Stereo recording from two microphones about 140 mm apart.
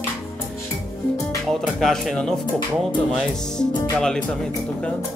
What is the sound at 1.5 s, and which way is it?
Speech, centre (ahead or behind).